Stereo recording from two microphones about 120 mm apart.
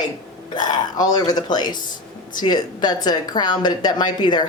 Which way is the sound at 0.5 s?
35° left (ahead or behind).